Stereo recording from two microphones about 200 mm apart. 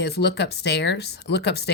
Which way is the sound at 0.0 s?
55° left (ahead or behind).